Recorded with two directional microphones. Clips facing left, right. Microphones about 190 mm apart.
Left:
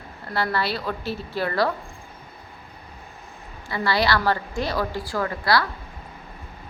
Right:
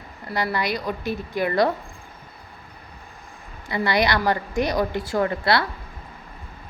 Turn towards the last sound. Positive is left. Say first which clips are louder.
# right 2 dB
turn(degrees=-25)  # may be behind; listen again after turning